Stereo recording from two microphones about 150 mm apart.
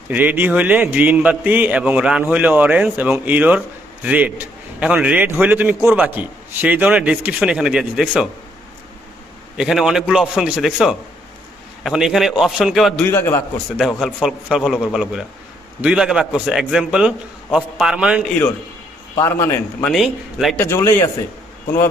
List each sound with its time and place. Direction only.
0.1 s a man's voice: 10° right (ahead or behind)
9.6 s a man's voice: 5° right (ahead or behind)
13.1 s speech: 15° left (ahead or behind)
13.7 s a man's voice: 5° right (ahead or behind)
19.1 s speech: 20° left (ahead or behind)
19.9 s a man's voice: centre (ahead or behind)
20.6 s speech: 15° left (ahead or behind)